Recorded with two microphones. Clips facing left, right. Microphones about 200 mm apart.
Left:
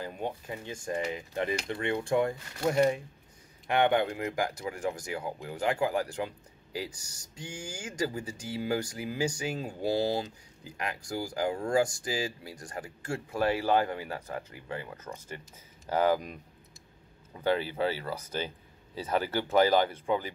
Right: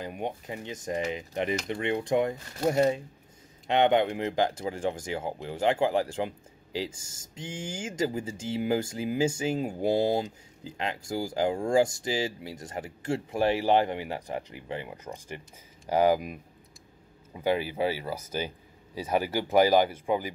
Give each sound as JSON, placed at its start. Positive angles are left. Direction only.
{"t": 0.0, "sound": "speech", "side_deg": -15}